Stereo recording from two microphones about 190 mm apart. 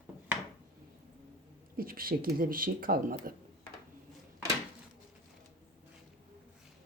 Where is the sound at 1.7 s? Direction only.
50° right (ahead or behind).